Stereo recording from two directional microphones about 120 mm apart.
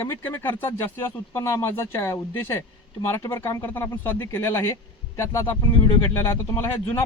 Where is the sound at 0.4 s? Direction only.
20° left (ahead or behind).